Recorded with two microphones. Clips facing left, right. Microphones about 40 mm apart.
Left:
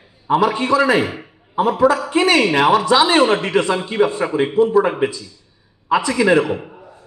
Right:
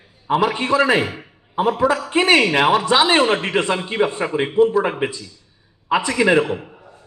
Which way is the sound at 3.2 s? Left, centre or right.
Centre.